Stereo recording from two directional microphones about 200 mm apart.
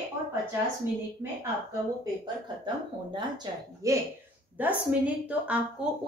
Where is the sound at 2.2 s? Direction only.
20° right (ahead or behind).